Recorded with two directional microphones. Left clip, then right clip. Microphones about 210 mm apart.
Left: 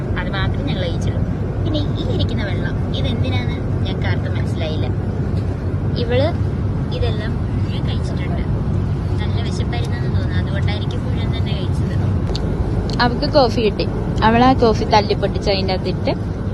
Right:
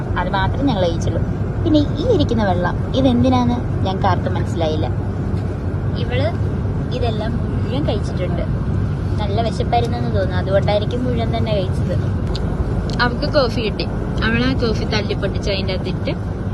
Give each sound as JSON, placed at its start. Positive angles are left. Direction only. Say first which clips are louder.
{"t": 0.2, "sound": "vehicle", "louder": "right 7 dB", "side_deg": 0}
{"t": 1.6, "sound": "speech", "louder": "right 9 dB", "side_deg": 0}
{"t": 13.0, "sound": "speech", "louder": "left 2 dB", "side_deg": 10}